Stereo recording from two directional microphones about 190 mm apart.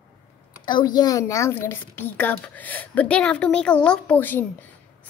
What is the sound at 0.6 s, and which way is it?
A woman's voice, 20° left (ahead or behind).